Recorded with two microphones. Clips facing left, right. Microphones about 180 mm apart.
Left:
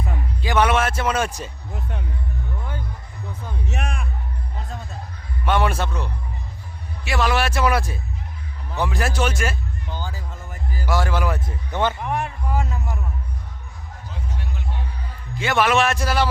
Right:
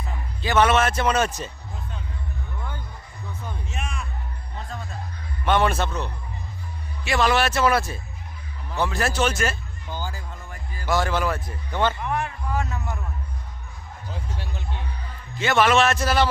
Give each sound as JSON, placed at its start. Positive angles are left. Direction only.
{"t": 0.4, "sound": "speech", "side_deg": 10}
{"t": 1.7, "sound": "music", "side_deg": 65}
{"t": 3.7, "sound": "music", "side_deg": 60}
{"t": 5.5, "sound": "speech", "side_deg": 10}
{"t": 9.9, "sound": "a sound", "side_deg": 0}
{"t": 14.1, "sound": "music", "side_deg": -30}
{"t": 15.4, "sound": "speech", "side_deg": 10}